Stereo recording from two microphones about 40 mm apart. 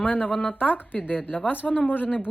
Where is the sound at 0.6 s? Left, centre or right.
Left.